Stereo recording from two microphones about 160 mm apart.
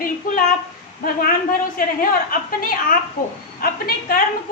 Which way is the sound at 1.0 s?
65° left (ahead or behind).